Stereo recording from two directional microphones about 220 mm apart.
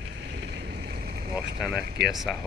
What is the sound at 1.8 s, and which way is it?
Speech, 45° right (ahead or behind).